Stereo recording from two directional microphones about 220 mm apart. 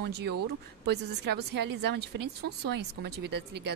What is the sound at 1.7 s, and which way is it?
A woman's voice, 50° right (ahead or behind).